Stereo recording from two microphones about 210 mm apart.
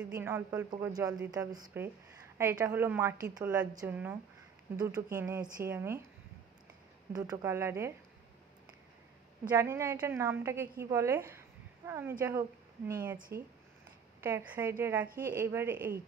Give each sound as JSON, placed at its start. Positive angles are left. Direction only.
{"t": 0.2, "sound": "a woman's voice", "side_deg": -10}
{"t": 7.1, "sound": "a woman's voice", "side_deg": -15}
{"t": 9.5, "sound": "a woman's voice", "side_deg": -10}
{"t": 13.3, "sound": "a woman's voice", "side_deg": -50}
{"t": 14.2, "sound": "a woman's voice", "side_deg": -10}
{"t": 15.0, "sound": "a woman's voice", "side_deg": -45}
{"t": 15.3, "sound": "a woman's voice", "side_deg": -10}